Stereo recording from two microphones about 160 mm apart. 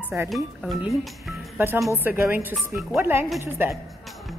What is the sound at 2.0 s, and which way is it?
Speech, 10° right (ahead or behind).